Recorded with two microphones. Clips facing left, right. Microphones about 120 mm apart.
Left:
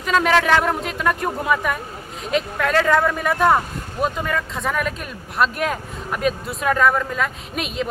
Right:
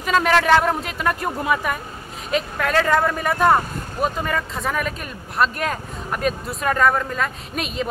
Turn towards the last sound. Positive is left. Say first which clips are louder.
# even
turn(degrees=0)  # may be behind; listen again after turning